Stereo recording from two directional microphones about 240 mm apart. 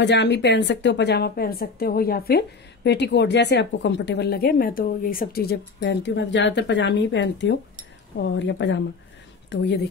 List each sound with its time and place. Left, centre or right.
0.0 s speech: left